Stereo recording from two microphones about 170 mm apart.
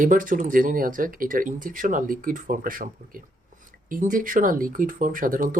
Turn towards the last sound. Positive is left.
turn(degrees=-55)  # may be behind; listen again after turning